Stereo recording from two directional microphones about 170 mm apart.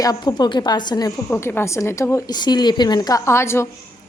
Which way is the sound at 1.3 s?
15° left (ahead or behind).